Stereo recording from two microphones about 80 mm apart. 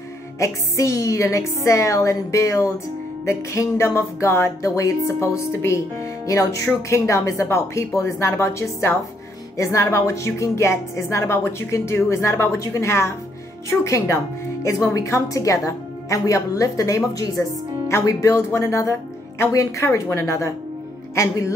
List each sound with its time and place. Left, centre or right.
0.4 s speech: left